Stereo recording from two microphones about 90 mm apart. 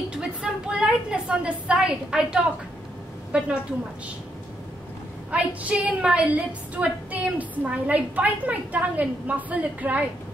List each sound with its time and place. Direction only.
0.1 s a woman's voice: 10° right (ahead or behind)
5.3 s a woman's voice: 15° right (ahead or behind)